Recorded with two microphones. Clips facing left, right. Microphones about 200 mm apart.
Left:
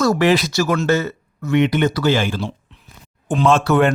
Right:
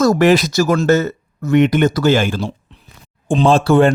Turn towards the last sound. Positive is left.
turn(degrees=-30)  # may be behind; listen again after turning